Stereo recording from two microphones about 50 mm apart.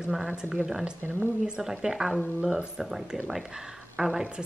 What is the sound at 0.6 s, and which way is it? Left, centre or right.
Speech, centre.